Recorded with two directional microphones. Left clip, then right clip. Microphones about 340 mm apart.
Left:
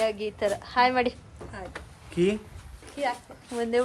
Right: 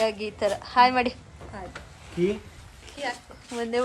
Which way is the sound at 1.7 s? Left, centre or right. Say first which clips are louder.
Left 7 dB; left.